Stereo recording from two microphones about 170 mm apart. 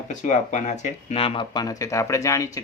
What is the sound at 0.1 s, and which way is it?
Speech, 45° left (ahead or behind).